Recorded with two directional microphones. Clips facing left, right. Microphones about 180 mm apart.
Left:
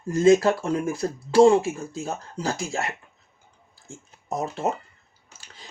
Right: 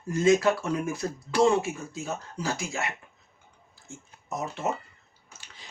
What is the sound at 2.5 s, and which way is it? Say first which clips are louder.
Speech: left 3 dB; 40° left (ahead or behind).